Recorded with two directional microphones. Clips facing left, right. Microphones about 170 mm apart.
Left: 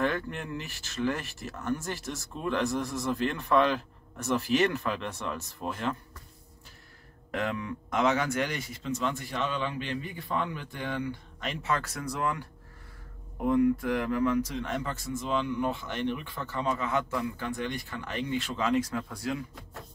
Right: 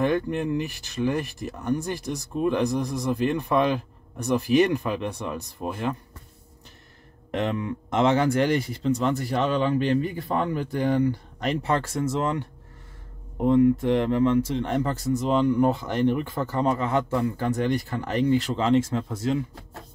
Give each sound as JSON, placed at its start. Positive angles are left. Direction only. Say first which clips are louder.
{"t": 0.0, "sound": "speech", "louder": "right 7 dB", "side_deg": -15}
{"t": 7.2, "sound": "speech", "louder": "right 5 dB", "side_deg": -20}